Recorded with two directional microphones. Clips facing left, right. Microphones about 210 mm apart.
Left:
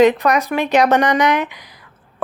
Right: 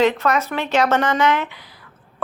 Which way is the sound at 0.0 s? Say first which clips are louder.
Left 5 dB; 15° left (ahead or behind).